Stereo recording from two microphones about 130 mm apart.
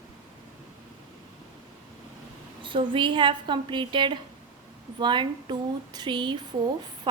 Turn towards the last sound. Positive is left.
turn(degrees=-40)  # may be behind; listen again after turning